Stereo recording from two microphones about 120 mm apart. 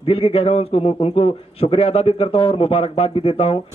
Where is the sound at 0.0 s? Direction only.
50° left (ahead or behind).